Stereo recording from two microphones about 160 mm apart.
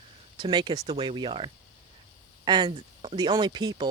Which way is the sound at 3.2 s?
25° right (ahead or behind).